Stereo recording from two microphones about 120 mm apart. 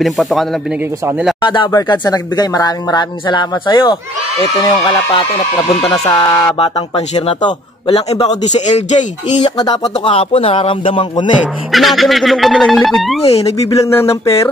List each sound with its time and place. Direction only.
0.0 s music: centre (ahead or behind)
1.4 s speech: 40° left (ahead or behind)
5.7 s speech: 50° left (ahead or behind)
6.0 s speech: 30° left (ahead or behind)
7.4 s a man's voice: 45° left (ahead or behind)
8.3 s speech: 70° left (ahead or behind)
9.4 s speech: 40° left (ahead or behind)
10.1 s speech: 55° left (ahead or behind)
11.7 s music: centre (ahead or behind)
13.3 s speech: 55° left (ahead or behind)
13.7 s speech: 25° left (ahead or behind)